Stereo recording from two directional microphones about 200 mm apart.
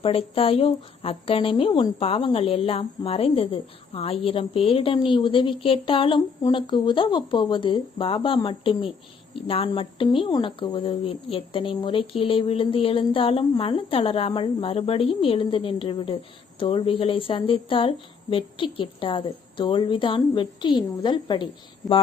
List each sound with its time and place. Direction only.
0.0 s speech: 30° left (ahead or behind)